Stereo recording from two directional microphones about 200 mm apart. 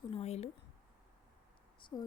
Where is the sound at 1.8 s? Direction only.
25° left (ahead or behind).